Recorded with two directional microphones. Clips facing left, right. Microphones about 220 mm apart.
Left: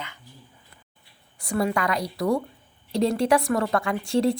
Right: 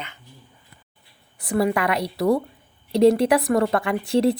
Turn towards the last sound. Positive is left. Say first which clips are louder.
# right 3 dB
turn(degrees=0)  # may be behind; listen again after turning